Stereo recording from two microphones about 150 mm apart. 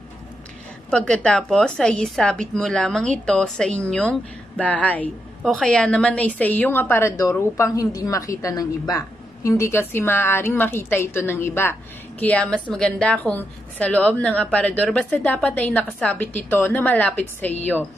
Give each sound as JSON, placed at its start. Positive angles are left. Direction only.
{"t": 0.9, "sound": "a woman's voice", "side_deg": 5}